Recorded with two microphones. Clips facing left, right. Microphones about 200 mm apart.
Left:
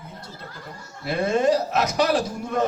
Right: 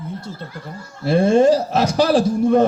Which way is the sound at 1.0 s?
30° right (ahead or behind).